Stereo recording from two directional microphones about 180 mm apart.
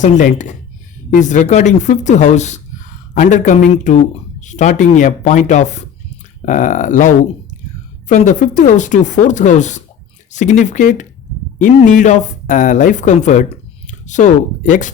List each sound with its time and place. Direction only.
0.0 s speech: 45° left (ahead or behind)